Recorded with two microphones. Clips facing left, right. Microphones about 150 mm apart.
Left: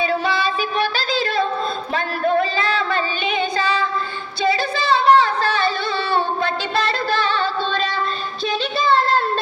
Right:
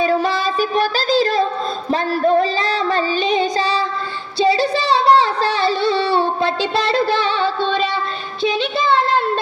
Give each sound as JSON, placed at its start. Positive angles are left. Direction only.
{"t": 0.0, "sound": "music", "side_deg": -40}
{"t": 1.9, "sound": "child singing", "side_deg": -35}
{"t": 4.4, "sound": "singing", "side_deg": -35}
{"t": 7.3, "sound": "music", "side_deg": -20}
{"t": 8.4, "sound": "a sound", "side_deg": -20}